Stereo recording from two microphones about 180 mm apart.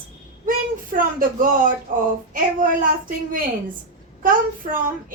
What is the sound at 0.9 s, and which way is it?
A child's voice, 50° right (ahead or behind).